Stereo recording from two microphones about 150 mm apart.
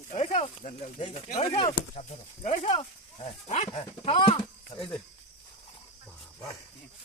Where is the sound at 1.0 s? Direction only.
35° left (ahead or behind).